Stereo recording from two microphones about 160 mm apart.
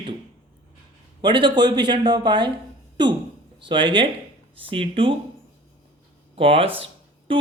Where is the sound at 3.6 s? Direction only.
30° right (ahead or behind).